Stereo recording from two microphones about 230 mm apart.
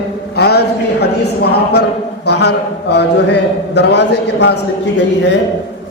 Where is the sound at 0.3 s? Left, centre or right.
Left.